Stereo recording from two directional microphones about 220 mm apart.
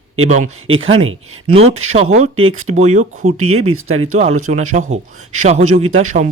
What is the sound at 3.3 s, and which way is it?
Speech, 80° right.